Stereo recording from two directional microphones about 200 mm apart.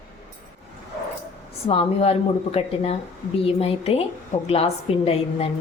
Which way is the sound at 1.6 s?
30° left (ahead or behind).